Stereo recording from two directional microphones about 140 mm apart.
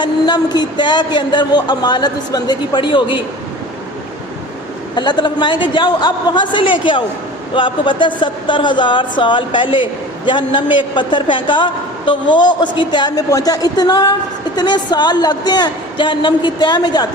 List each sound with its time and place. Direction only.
0.0 s speech: 30° left (ahead or behind)
4.9 s speech: 30° left (ahead or behind)